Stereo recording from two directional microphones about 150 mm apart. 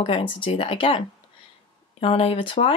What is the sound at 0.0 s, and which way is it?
Speech, 35° left (ahead or behind).